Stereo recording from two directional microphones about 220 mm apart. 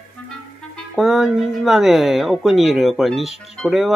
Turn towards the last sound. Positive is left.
turn(degrees=0)  # may be behind; listen again after turning